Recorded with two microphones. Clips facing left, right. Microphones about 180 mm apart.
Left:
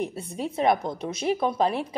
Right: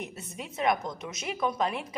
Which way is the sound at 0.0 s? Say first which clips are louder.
Left 9 dB; 30° left (ahead or behind).